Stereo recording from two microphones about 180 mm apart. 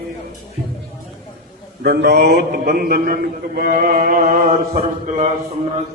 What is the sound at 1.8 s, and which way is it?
A man's voice, 65° right (ahead or behind).